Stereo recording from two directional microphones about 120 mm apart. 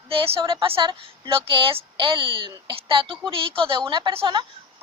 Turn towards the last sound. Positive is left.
turn(degrees=-45)  # may be behind; listen again after turning